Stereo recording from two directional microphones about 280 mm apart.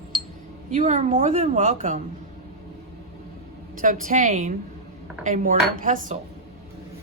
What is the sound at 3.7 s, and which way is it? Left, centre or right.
A woman's voice, right.